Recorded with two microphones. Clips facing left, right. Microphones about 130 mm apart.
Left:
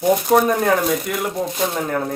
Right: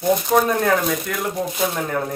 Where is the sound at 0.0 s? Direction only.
10° left (ahead or behind).